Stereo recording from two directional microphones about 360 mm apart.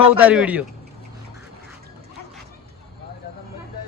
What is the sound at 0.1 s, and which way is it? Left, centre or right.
Speech, centre.